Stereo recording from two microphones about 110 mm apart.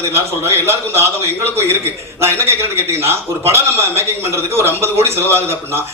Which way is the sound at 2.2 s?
20° right (ahead or behind).